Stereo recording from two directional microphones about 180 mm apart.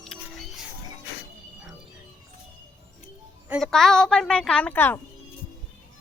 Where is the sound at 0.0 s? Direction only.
Centre (ahead or behind).